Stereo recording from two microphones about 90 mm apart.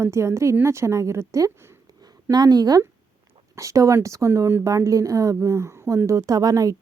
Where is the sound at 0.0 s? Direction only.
30° right (ahead or behind).